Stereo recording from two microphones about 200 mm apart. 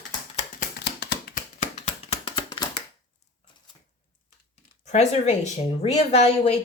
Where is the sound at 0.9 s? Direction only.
50° left (ahead or behind); by 2.8 s 20° left (ahead or behind).